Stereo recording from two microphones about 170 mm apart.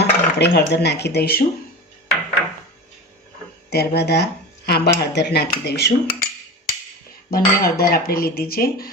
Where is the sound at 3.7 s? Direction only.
75° left (ahead or behind).